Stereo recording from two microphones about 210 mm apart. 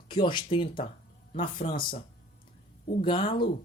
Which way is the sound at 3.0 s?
25° left (ahead or behind).